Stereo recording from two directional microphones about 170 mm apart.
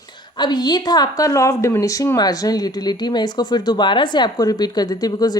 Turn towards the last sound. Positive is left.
turn(degrees=20)  # may be behind; listen again after turning